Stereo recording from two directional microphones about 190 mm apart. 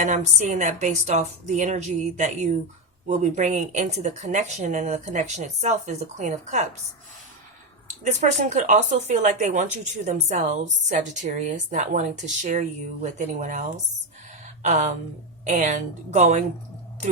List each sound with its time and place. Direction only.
0.0 s speech: 40° right (ahead or behind)
8.0 s speech: 40° right (ahead or behind)
14.4 s a sound: 40° right (ahead or behind)
15.4 s speech: 40° right (ahead or behind)